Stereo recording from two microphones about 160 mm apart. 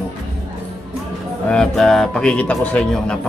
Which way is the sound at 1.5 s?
5° left (ahead or behind).